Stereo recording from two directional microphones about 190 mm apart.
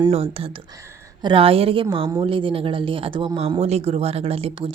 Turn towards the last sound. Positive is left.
turn(degrees=-30)  # may be behind; listen again after turning